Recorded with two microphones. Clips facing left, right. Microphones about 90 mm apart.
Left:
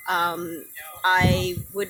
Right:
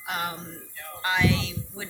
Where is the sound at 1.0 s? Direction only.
40° left (ahead or behind).